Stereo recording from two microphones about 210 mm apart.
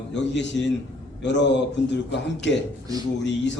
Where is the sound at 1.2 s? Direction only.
55° left (ahead or behind).